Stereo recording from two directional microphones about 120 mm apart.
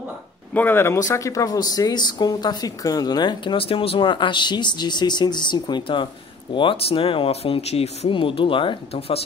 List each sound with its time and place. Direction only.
0.6 s speech: 20° left (ahead or behind); by 8.1 s 60° left (ahead or behind)
8.1 s speech: 45° left (ahead or behind)